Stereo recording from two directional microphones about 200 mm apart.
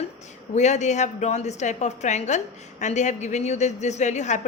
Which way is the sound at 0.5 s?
35° left (ahead or behind).